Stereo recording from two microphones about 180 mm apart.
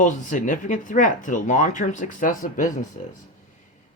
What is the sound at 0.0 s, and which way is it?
Speech, 45° left (ahead or behind).